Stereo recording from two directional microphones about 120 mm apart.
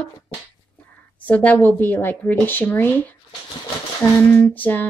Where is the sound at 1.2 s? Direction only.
10° left (ahead or behind).